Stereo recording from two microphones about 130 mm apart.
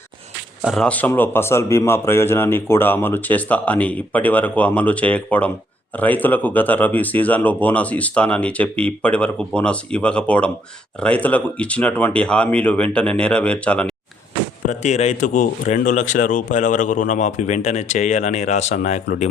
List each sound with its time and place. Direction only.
0.6 s speech: centre (ahead or behind)
0.9 s speech: 15° left (ahead or behind)
14.7 s speech: 60° left (ahead or behind)